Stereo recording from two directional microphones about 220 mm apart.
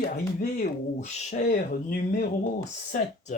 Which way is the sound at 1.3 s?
40° left (ahead or behind).